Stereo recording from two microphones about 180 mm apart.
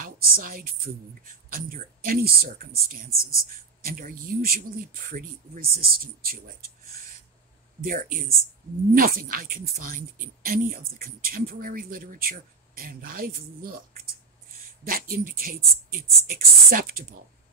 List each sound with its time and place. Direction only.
0.0 s speech: 50° right (ahead or behind)
14.9 s speech: 55° right (ahead or behind)